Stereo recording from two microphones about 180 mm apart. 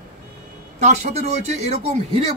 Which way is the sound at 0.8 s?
40° right (ahead or behind).